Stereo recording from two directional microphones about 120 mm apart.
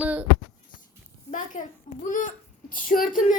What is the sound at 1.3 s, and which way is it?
A child's voice, 90° left.